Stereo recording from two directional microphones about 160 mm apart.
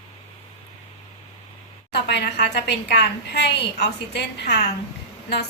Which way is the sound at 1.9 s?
90° left.